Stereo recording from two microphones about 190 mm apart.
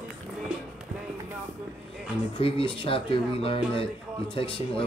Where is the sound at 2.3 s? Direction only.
30° left (ahead or behind).